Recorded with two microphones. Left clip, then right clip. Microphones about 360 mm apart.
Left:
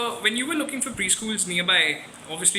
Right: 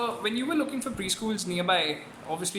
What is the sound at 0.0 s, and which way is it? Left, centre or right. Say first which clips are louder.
Speech: left 5 dB; centre.